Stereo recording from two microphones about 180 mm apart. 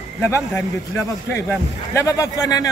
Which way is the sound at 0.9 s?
15° left (ahead or behind).